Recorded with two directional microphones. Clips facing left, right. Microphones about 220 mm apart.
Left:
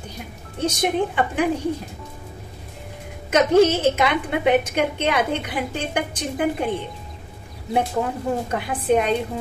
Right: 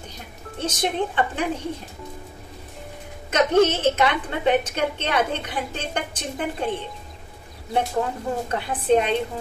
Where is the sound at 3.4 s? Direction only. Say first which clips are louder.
Left 2 dB; 10° left (ahead or behind).